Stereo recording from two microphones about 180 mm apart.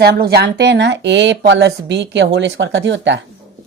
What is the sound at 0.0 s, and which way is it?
Speech, 60° right (ahead or behind).